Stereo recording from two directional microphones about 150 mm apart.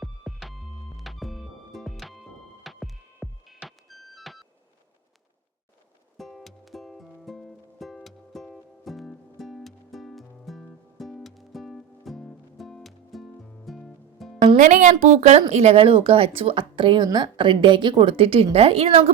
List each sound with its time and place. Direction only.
0.0 s music: centre (ahead or behind)
6.1 s music: centre (ahead or behind)
14.4 s speech: 55° right (ahead or behind)